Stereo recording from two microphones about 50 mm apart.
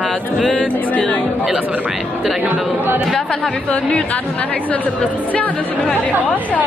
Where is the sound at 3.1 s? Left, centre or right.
Centre; by 5.5 s left.